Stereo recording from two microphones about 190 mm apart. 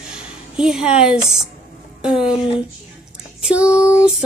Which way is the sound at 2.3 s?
25° left (ahead or behind).